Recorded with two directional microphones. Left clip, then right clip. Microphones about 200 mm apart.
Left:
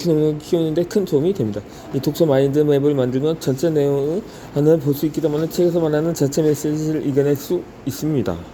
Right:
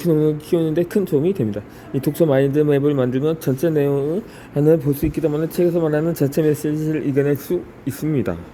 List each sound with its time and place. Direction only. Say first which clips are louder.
0.0 s speech: even; 20° right (ahead or behind)